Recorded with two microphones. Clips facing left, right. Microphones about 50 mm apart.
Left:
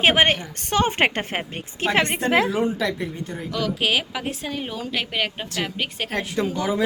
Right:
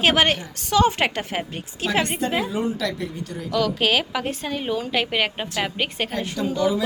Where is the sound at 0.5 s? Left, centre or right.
Left.